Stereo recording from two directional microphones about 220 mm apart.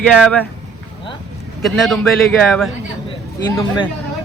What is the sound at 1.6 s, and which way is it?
Speech, centre (ahead or behind).